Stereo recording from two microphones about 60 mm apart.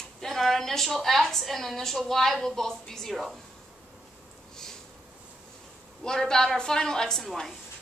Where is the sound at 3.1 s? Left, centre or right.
Centre.